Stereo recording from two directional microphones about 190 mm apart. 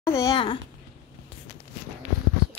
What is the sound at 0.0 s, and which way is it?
Speech, 15° left (ahead or behind).